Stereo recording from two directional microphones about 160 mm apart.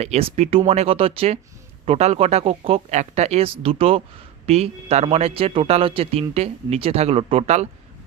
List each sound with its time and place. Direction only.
0.0 s a man's voice: 40° right (ahead or behind)